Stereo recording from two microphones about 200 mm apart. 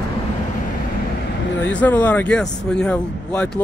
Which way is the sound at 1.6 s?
5° left (ahead or behind).